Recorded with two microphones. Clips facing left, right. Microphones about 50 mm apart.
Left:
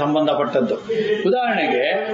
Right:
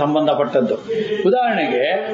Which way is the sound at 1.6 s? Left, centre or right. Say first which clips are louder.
Right 1 dB; centre.